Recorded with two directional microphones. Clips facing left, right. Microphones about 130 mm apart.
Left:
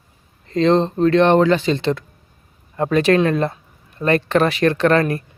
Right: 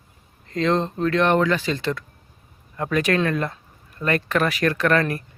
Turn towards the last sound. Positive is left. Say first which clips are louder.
# left 4 dB
turn(degrees=25)  # may be behind; listen again after turning